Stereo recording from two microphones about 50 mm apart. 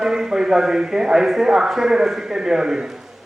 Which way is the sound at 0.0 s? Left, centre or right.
Centre.